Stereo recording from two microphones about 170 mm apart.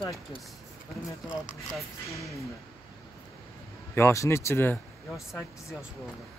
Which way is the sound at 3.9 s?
15° left (ahead or behind).